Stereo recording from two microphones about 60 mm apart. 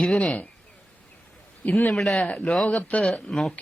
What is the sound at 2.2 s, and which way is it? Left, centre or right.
Speech, centre.